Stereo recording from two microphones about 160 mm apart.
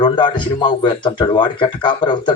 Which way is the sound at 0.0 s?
30° left (ahead or behind).